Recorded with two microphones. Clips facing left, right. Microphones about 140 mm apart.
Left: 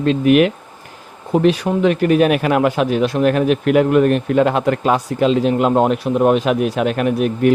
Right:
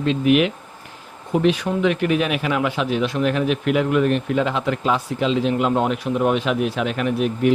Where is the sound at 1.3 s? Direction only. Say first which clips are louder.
Left 4 dB; 35° left (ahead or behind).